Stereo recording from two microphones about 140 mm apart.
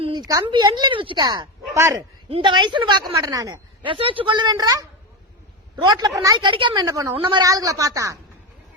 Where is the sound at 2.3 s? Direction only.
40° right (ahead or behind).